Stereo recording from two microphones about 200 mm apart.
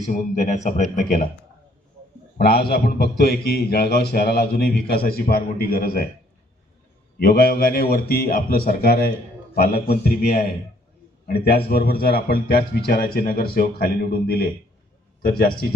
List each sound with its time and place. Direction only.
0.1 s speech: 35° left (ahead or behind)
2.5 s a man's voice: 50° left (ahead or behind)
7.2 s a man's voice: 50° left (ahead or behind)